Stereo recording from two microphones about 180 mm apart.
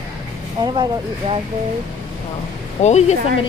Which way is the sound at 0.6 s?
25° right (ahead or behind).